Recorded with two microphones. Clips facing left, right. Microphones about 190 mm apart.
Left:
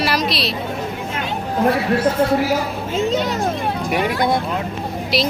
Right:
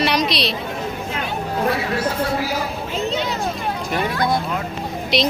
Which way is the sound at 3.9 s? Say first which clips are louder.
Left 2 dB; 20° left (ahead or behind).